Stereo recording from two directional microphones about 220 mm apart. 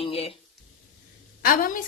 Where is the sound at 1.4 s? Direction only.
40° left (ahead or behind).